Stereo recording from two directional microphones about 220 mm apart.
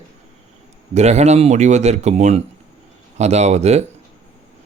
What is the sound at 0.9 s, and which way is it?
Speech, 30° right (ahead or behind).